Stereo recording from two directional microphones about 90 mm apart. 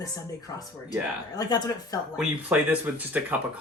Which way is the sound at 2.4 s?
20° right (ahead or behind).